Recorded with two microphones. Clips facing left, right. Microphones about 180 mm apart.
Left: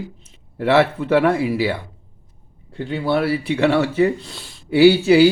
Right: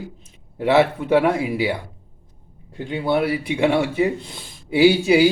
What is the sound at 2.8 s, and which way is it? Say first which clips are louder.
Speech: left 1 dB; 20° right (ahead or behind).